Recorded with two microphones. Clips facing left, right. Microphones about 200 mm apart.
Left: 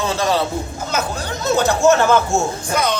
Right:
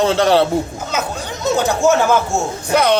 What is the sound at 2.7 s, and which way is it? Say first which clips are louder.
Speech: right 7 dB; 65° right (ahead or behind).